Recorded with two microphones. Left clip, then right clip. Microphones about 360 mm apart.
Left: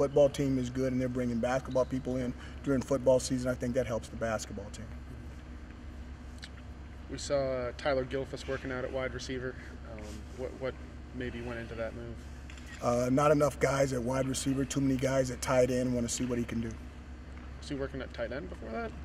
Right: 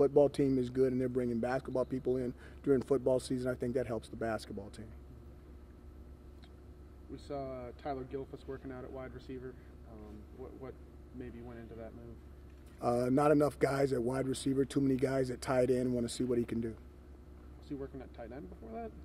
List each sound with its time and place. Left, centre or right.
0.0 s speech: right
7.2 s speech: centre
11.1 s speech: centre
12.8 s speech: right
17.6 s speech: centre